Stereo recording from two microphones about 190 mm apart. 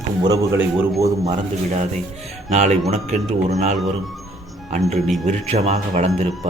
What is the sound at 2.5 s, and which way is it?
A man's voice, 40° right (ahead or behind).